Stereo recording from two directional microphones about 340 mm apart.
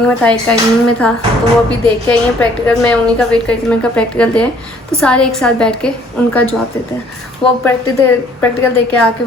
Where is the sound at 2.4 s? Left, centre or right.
Centre.